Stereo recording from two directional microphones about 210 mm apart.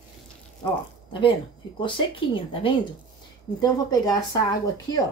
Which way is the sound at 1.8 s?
25° left (ahead or behind).